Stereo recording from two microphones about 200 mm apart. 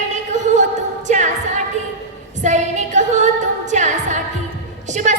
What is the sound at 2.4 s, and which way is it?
Singing, 35° right (ahead or behind).